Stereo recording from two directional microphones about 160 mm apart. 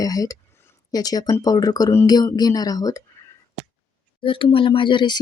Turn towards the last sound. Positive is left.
turn(degrees=30)  # may be behind; listen again after turning